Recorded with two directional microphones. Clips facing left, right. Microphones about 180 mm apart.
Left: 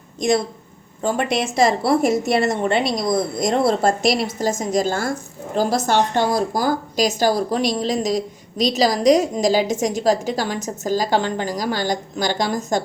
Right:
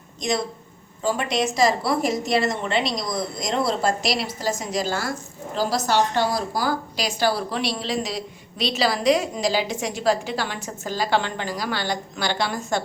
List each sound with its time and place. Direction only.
1.0 s a woman's voice: 50° left (ahead or behind)